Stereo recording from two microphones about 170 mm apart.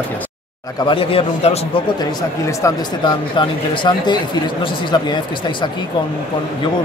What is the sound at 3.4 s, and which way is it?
Speech, 25° left (ahead or behind).